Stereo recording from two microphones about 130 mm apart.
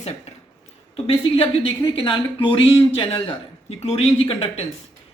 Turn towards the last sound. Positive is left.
turn(degrees=45)  # may be behind; listen again after turning